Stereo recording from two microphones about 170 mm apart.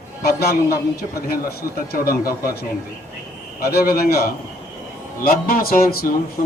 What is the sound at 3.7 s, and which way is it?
A man's voice, 65° left (ahead or behind).